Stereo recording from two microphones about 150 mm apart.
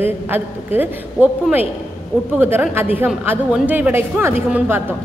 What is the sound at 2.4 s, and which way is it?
A woman's voice, 15° right (ahead or behind).